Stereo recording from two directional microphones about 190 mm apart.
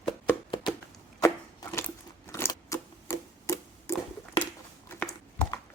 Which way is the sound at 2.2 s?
15° left (ahead or behind).